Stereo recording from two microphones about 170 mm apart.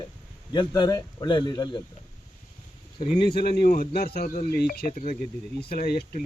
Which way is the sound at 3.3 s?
65° left (ahead or behind).